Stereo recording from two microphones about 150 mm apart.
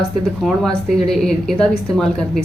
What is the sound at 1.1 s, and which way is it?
Speech, 5° left (ahead or behind).